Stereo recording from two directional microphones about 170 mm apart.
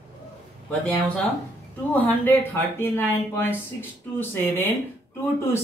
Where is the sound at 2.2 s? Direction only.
10° left (ahead or behind).